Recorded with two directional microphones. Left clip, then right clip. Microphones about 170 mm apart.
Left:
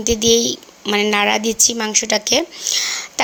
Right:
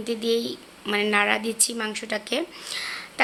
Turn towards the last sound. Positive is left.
turn(degrees=35)  # may be behind; listen again after turning